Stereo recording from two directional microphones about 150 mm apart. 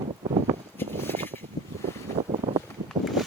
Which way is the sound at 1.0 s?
15° left (ahead or behind).